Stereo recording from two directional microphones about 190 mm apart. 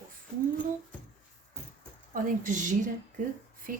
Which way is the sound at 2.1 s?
45° right (ahead or behind).